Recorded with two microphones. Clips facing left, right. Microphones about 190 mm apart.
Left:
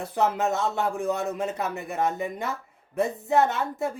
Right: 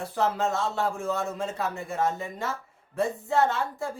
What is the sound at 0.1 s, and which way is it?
A man's voice, 20° left (ahead or behind).